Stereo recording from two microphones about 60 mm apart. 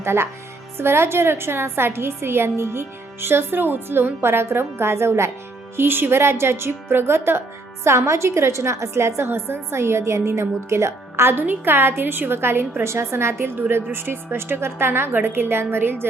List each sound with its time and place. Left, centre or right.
0.0 s a woman's voice: right
7.9 s a woman's voice: right